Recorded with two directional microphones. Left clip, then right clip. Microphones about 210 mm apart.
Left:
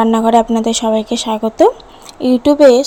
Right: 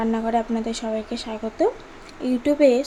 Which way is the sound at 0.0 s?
35° left (ahead or behind).